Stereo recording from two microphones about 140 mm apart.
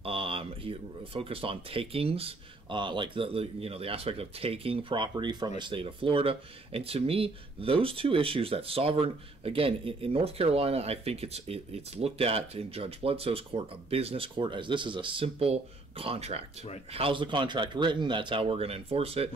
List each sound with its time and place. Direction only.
0.0 s speech: 40° right (ahead or behind)